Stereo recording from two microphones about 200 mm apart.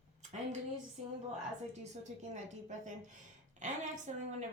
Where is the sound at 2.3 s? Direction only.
40° right (ahead or behind).